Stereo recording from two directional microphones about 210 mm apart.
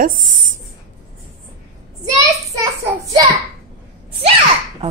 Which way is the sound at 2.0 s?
15° right (ahead or behind).